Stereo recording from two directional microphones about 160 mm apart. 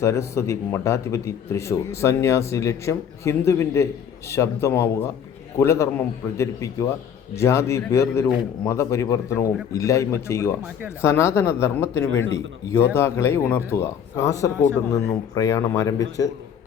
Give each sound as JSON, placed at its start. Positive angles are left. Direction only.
{"t": 0.0, "sound": "a man's voice", "side_deg": 15}